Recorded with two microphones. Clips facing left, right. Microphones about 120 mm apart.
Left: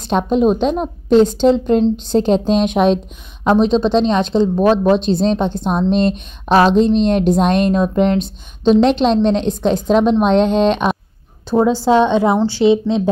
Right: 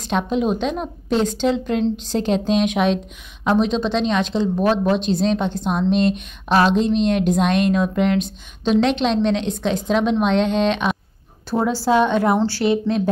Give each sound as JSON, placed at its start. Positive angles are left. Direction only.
{"t": 0.0, "sound": "a woman's voice", "side_deg": 35}
{"t": 11.5, "sound": "a woman's voice", "side_deg": 20}